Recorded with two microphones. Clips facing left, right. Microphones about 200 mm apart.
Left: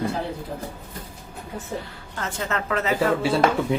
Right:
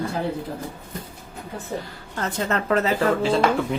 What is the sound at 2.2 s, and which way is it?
Speech, 40° right (ahead or behind).